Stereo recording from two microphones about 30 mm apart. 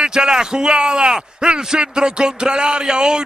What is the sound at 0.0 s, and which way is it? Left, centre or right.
A man's voice, right.